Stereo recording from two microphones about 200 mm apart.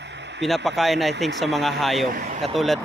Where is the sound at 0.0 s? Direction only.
60° right (ahead or behind).